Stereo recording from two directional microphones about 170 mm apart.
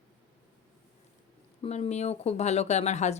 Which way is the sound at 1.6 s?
40° left (ahead or behind).